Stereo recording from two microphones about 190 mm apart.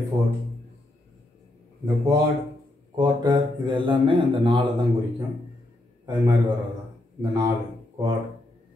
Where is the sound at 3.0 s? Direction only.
20° right (ahead or behind).